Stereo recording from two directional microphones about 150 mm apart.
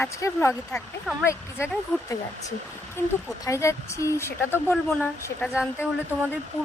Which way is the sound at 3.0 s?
15° left (ahead or behind).